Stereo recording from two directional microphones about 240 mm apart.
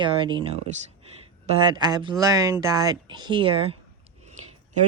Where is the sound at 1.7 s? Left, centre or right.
Centre.